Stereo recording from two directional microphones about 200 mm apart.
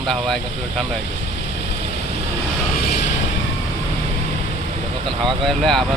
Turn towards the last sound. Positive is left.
turn(degrees=0)  # may be behind; listen again after turning